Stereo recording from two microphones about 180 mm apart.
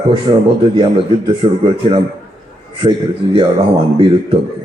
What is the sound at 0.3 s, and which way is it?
Speech, 30° right (ahead or behind).